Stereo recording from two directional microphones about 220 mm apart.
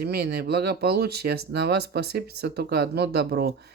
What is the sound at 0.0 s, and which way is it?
Speech, 45° right (ahead or behind).